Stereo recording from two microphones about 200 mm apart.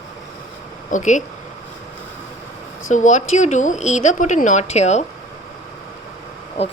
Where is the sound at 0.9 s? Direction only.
40° left (ahead or behind).